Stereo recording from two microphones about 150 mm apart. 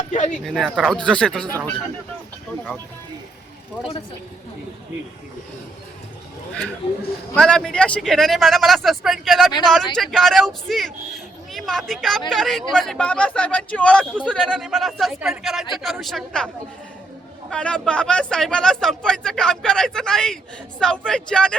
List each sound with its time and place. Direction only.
0.1 s speech: 55° left (ahead or behind)
0.6 s speech: centre (ahead or behind)
7.3 s speech: 5° left (ahead or behind)
17.5 s a man's voice: 5° left (ahead or behind)